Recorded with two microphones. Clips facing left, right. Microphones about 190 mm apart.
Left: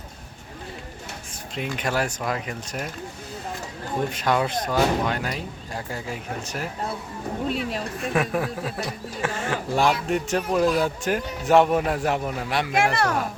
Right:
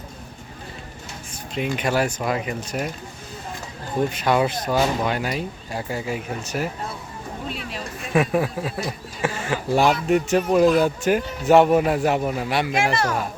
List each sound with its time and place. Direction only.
1.5 s speech: 5° right (ahead or behind)
4.1 s speech: 5° right (ahead or behind)
8.1 s speech: 5° right (ahead or behind)
12.7 s speech: 60° left (ahead or behind)